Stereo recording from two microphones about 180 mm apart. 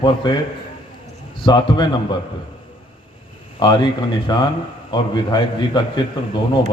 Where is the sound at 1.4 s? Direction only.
25° left (ahead or behind).